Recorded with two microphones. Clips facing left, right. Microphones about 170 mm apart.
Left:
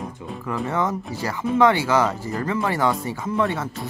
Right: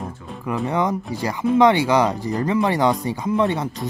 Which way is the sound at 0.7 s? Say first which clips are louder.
Right 3 dB; 15° right (ahead or behind).